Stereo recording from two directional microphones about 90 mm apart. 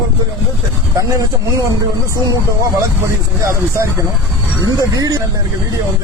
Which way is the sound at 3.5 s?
30° right (ahead or behind).